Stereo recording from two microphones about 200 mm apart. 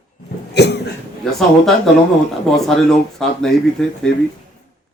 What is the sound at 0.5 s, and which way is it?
Cough, 60° left (ahead or behind).